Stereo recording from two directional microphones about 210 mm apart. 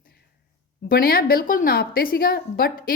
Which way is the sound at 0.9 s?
45° left (ahead or behind).